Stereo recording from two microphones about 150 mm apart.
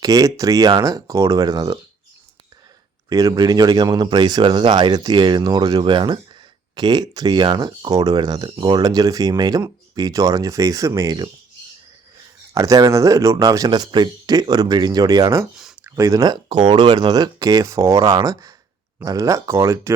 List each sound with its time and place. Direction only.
0.0 s speech: 25° right (ahead or behind)
3.1 s speech: 25° right (ahead or behind)
12.5 s speech: 20° right (ahead or behind)